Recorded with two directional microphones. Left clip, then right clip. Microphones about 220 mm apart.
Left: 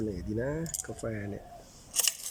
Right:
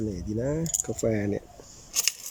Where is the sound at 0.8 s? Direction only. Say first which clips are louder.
Right 10 dB; 20° right (ahead or behind).